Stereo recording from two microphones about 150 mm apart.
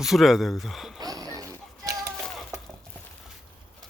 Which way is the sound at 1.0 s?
25° right (ahead or behind).